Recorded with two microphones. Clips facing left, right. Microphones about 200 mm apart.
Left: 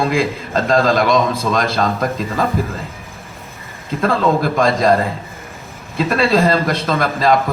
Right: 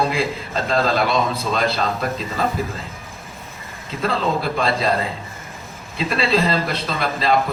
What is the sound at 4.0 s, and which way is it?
Speech, 50° left (ahead or behind).